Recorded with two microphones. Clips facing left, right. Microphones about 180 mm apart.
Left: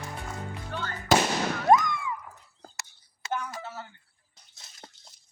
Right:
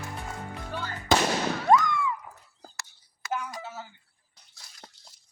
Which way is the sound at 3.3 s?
5° right (ahead or behind).